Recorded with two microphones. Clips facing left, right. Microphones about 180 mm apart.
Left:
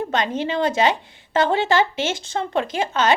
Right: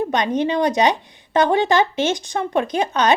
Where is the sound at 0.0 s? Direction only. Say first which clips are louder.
Right 3 dB; 15° right (ahead or behind).